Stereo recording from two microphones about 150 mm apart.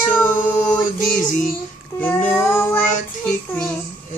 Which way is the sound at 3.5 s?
5° left (ahead or behind).